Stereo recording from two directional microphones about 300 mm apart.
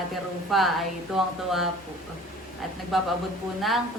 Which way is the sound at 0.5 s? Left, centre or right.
Centre.